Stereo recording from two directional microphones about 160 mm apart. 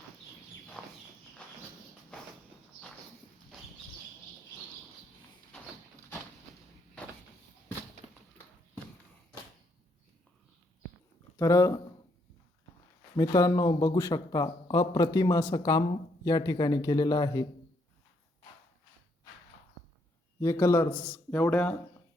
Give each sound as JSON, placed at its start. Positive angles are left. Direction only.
{"t": 0.8, "sound": "walk", "side_deg": 10}
{"t": 11.3, "sound": "speech", "side_deg": 20}
{"t": 13.1, "sound": "speech", "side_deg": 20}
{"t": 20.4, "sound": "speech", "side_deg": 20}